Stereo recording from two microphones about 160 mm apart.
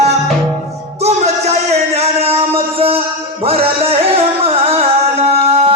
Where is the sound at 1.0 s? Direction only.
40° right (ahead or behind).